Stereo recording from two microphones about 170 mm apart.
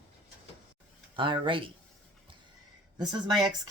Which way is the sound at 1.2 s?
30° right (ahead or behind).